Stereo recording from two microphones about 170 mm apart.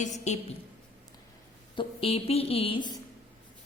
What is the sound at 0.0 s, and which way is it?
Speech, 45° left (ahead or behind).